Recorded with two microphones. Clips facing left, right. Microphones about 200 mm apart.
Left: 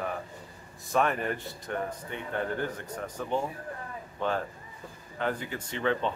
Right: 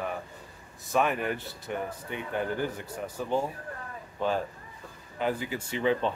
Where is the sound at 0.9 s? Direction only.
5° right (ahead or behind).